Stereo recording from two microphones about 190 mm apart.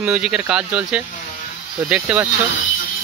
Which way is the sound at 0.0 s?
5° right (ahead or behind).